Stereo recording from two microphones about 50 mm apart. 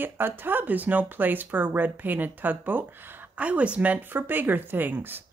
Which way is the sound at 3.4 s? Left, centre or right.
Right.